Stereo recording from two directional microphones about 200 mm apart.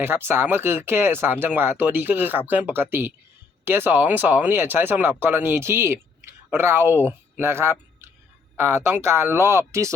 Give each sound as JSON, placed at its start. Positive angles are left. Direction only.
{"t": 0.0, "sound": "speech", "side_deg": -10}